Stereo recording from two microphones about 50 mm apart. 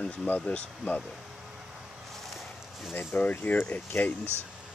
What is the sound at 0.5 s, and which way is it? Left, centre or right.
Speech, left.